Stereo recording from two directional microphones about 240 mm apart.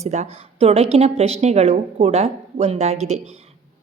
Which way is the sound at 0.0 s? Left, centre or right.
Right.